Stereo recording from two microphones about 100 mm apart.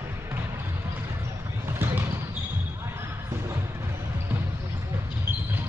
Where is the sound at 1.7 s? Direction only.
20° right (ahead or behind).